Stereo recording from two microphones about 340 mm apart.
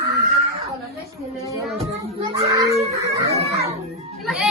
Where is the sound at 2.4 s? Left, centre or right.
Centre.